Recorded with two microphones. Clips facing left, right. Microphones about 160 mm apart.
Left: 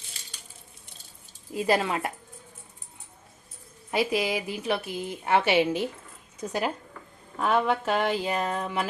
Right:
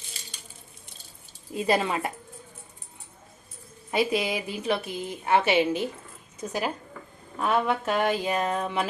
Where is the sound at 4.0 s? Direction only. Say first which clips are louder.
Even; 5° left (ahead or behind).